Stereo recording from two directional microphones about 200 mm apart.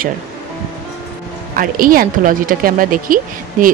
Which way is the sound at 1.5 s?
45° right (ahead or behind).